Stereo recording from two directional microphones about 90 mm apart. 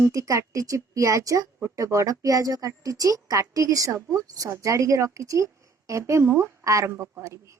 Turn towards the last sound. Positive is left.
turn(degrees=-30)  # may be behind; listen again after turning